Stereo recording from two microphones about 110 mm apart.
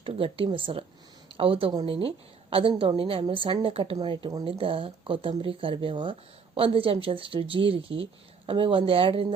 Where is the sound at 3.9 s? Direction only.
45° right (ahead or behind).